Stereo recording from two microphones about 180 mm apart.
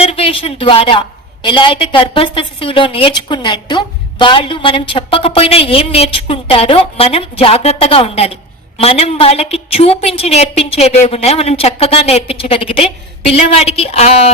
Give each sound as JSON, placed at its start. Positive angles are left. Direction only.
{"t": 0.0, "sound": "a woman's voice", "side_deg": 30}